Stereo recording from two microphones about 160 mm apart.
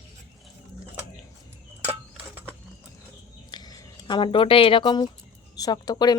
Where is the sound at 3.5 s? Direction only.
25° left (ahead or behind).